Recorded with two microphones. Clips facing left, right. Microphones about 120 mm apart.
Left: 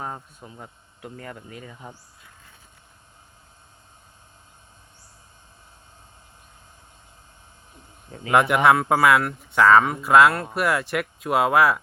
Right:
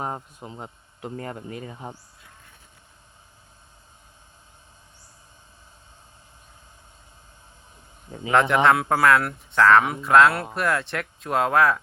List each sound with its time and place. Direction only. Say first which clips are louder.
0.0 s a man's voice: right 3 dB; 20° right (ahead or behind)
1.1 s speech: right 6 dB; 35° right (ahead or behind)
8.3 s speech: left 1 dB; 10° left (ahead or behind)